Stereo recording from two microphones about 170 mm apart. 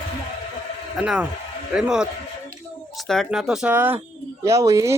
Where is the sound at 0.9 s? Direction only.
5° right (ahead or behind).